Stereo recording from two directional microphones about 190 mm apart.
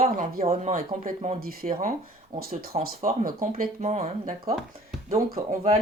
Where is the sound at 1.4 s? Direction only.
50° right (ahead or behind).